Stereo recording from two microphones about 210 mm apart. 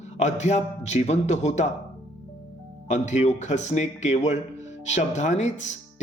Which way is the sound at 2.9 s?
35° left (ahead or behind).